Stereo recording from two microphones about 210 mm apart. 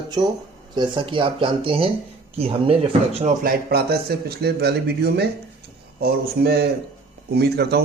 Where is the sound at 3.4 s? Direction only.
45° right (ahead or behind).